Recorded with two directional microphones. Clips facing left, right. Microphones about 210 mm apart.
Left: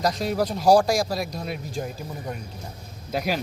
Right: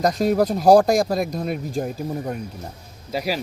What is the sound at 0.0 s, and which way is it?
Speech, 50° right (ahead or behind).